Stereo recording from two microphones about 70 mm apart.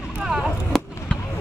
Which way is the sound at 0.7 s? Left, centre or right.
Centre.